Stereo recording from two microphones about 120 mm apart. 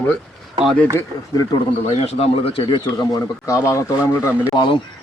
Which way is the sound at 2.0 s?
55° left (ahead or behind).